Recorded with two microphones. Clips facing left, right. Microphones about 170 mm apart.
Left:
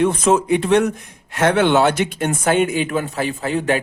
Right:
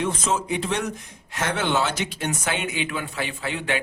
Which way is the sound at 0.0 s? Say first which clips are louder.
Left 9 dB; 60° left (ahead or behind).